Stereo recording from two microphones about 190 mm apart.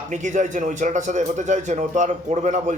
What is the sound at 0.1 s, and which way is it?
Speech, 40° right (ahead or behind).